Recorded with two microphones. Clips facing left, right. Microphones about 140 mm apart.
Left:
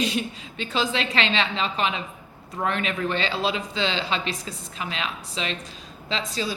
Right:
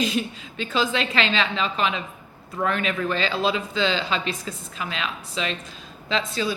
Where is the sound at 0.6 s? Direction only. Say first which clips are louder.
Right 2 dB; 35° left (ahead or behind).